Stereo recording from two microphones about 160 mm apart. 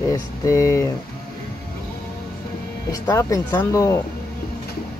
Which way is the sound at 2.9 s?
20° left (ahead or behind).